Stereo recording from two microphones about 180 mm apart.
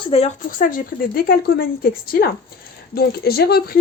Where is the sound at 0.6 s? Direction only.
50° left (ahead or behind).